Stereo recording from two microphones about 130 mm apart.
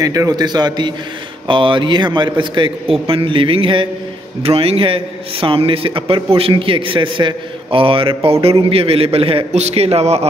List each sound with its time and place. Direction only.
0.0 s a man's voice: 30° right (ahead or behind); by 10.2 s 55° right (ahead or behind)